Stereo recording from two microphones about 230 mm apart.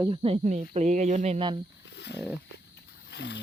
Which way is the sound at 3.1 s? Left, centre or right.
Left.